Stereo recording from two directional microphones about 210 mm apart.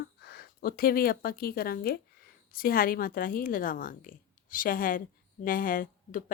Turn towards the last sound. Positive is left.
turn(degrees=40)  # may be behind; listen again after turning